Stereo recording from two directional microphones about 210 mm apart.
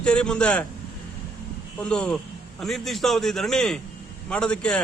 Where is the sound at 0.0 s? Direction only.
5° left (ahead or behind).